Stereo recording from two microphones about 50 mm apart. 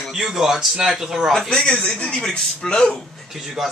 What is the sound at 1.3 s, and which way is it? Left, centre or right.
A man's voice, centre.